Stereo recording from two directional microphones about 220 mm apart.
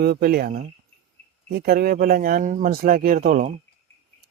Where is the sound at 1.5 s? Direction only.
45° right (ahead or behind).